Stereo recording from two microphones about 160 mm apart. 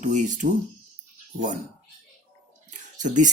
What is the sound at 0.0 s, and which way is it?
Speech, 50° right (ahead or behind).